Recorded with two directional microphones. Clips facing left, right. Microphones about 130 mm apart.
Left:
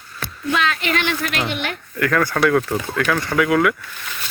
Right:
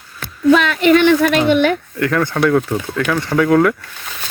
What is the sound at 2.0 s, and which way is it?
Speech, 20° right (ahead or behind).